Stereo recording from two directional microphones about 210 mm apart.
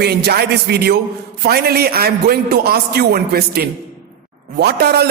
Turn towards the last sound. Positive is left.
turn(degrees=-50)  # may be behind; listen again after turning